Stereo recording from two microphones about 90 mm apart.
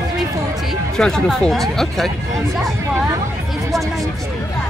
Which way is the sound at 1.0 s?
5° left (ahead or behind).